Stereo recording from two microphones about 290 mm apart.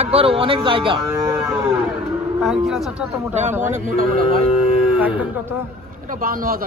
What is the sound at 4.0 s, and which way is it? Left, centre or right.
Speech, right.